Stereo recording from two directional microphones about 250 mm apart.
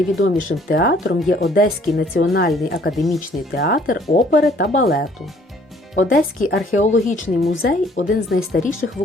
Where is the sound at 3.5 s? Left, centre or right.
Left.